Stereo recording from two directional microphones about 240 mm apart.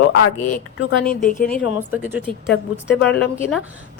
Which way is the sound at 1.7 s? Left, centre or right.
Centre.